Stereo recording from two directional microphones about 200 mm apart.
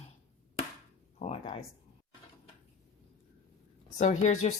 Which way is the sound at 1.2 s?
30° left (ahead or behind).